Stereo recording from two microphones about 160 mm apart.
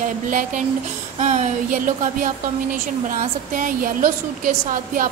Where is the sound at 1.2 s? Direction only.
50° right (ahead or behind).